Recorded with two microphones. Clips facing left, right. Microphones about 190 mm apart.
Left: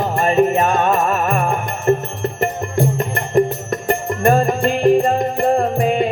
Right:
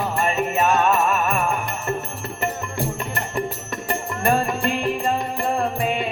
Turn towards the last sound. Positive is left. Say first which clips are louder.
# left 6 dB
turn(degrees=45)  # may be behind; listen again after turning